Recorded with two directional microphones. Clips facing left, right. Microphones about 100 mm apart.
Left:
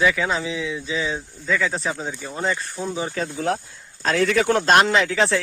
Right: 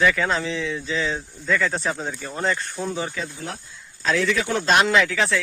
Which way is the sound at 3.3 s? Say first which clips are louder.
Left 10 dB; 90° left.